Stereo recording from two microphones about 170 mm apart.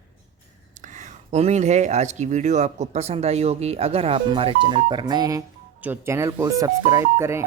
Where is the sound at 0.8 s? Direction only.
45° right (ahead or behind).